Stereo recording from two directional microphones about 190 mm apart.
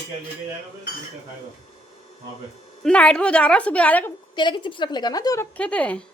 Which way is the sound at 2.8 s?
5° left (ahead or behind).